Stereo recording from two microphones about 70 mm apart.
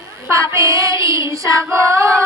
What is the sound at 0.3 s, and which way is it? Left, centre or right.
Child singing, right.